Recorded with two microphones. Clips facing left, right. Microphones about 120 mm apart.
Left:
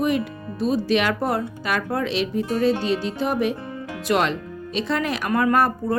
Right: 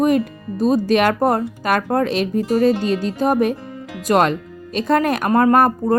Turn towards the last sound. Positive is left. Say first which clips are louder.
# right 5 dB
turn(degrees=-45)  # may be behind; listen again after turning